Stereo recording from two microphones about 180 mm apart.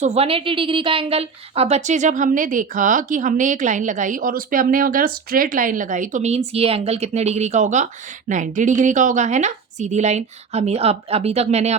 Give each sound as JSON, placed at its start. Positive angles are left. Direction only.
{"t": 0.0, "sound": "a woman's voice", "side_deg": -35}